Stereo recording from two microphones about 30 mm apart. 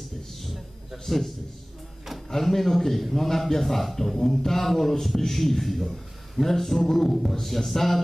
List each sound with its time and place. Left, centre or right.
0.9 s a man's voice: centre
2.3 s a man's voice: centre